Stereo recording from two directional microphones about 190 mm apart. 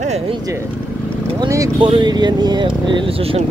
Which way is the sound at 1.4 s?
20° right (ahead or behind).